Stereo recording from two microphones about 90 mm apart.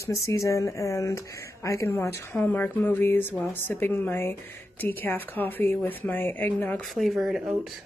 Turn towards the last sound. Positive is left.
turn(degrees=0)  # may be behind; listen again after turning